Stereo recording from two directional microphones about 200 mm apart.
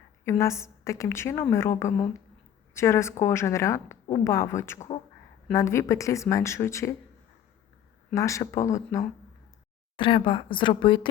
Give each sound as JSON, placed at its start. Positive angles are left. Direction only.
{"t": 0.3, "sound": "a woman's voice", "side_deg": 15}
{"t": 8.1, "sound": "a woman's voice", "side_deg": 15}
{"t": 10.0, "sound": "speech", "side_deg": 25}